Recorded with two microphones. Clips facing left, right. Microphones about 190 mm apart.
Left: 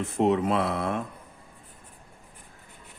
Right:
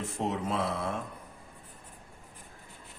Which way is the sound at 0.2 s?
65° left (ahead or behind).